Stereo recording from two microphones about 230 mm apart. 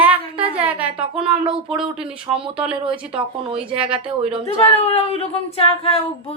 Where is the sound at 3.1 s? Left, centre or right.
Right.